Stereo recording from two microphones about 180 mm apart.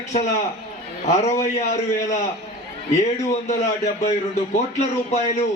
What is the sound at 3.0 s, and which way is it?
Speech, 40° left (ahead or behind).